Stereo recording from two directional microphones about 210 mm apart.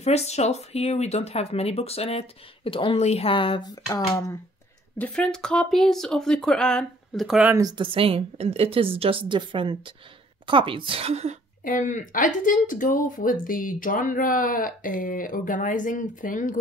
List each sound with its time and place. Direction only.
0.0 s speech: 30° left (ahead or behind); by 7.5 s centre (ahead or behind)
7.5 s a woman's voice: 20° right (ahead or behind)
11.6 s speech: 40° left (ahead or behind)